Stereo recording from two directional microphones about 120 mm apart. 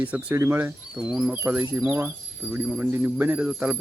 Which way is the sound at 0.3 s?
20° right (ahead or behind).